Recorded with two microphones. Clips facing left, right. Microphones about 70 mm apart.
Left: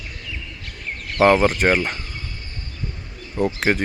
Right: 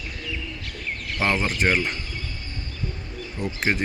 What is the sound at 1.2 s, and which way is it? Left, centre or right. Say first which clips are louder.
Speech: left 8 dB; left.